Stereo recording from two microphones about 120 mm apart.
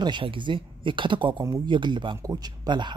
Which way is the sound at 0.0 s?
45° right (ahead or behind).